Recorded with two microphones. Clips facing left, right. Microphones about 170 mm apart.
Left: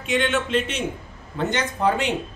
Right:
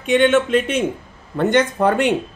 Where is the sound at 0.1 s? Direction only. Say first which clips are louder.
Right 8 dB; 50° right (ahead or behind).